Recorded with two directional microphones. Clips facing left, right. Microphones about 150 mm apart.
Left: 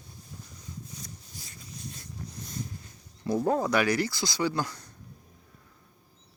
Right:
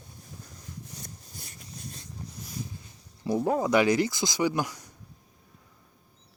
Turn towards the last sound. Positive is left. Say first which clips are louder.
# right 2 dB
turn(degrees=-15)  # may be behind; listen again after turning